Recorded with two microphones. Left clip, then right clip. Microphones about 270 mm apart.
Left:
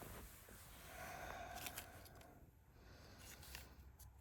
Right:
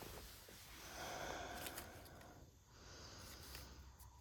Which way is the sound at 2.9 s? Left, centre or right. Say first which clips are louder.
Right 6 dB; right.